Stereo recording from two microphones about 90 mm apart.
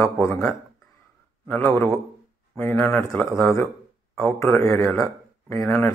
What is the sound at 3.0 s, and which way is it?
Speech, 25° left (ahead or behind).